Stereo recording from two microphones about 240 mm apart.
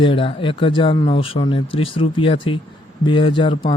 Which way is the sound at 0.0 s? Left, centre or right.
Left.